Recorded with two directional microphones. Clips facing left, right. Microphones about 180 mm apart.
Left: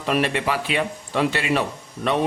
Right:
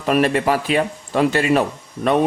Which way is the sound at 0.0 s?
45° right (ahead or behind).